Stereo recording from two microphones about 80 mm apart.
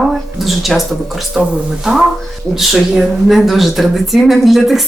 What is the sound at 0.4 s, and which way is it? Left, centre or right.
Speech, centre.